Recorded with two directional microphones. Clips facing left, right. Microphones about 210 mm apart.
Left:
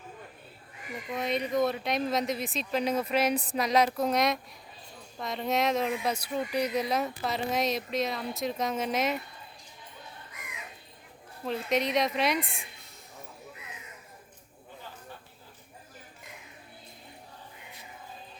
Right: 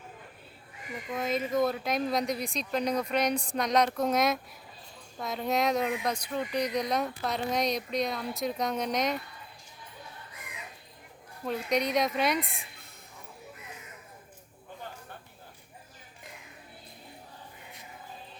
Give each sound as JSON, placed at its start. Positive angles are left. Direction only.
{"t": 1.1, "sound": "speech", "side_deg": 0}
{"t": 10.3, "sound": "bird", "side_deg": -30}
{"t": 11.4, "sound": "speech", "side_deg": 0}